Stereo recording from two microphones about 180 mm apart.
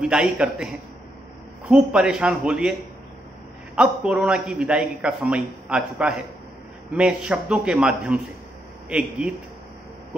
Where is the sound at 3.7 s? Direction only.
5° right (ahead or behind).